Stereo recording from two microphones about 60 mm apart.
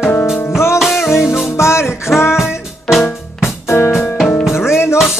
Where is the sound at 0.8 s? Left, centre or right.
Centre.